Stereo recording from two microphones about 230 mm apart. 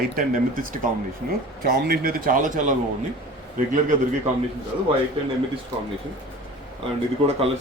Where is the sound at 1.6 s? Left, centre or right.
Right.